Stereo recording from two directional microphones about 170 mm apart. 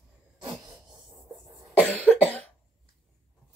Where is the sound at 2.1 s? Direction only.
10° left (ahead or behind).